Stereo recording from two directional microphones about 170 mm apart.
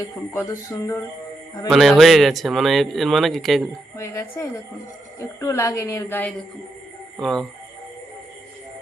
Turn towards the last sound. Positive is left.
turn(degrees=0)  # may be behind; listen again after turning